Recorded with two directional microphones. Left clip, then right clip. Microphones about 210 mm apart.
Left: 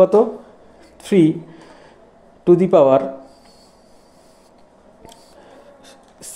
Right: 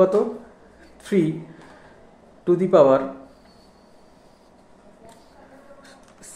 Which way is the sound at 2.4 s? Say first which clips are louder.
Left 3 dB; 30° left (ahead or behind).